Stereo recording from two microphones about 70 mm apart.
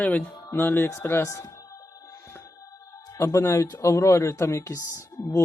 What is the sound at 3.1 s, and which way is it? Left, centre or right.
Speech, left.